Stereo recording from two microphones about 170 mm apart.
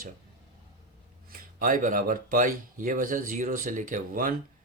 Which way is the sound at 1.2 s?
50° right (ahead or behind).